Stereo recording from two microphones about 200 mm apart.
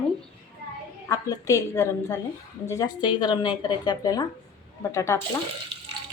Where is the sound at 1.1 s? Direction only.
15° left (ahead or behind).